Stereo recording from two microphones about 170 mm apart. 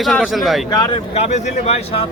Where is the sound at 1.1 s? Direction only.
40° left (ahead or behind).